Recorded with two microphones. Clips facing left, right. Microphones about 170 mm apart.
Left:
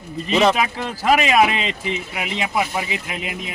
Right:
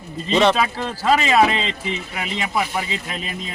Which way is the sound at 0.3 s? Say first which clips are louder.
Even; 10° left (ahead or behind).